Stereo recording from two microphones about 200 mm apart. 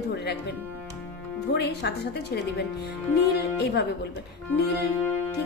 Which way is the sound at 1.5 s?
55° left (ahead or behind).